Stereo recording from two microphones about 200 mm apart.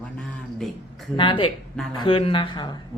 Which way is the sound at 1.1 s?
25° left (ahead or behind).